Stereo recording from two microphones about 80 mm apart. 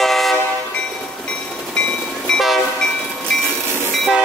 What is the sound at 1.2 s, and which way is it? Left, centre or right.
Train, centre.